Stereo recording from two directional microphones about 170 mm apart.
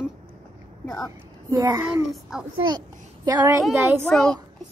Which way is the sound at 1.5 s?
20° right (ahead or behind).